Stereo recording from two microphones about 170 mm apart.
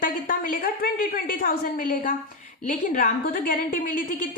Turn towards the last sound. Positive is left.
turn(degrees=55)  # may be behind; listen again after turning